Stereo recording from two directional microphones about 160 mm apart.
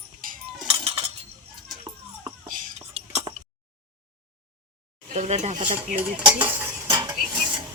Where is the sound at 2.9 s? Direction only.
40° right (ahead or behind).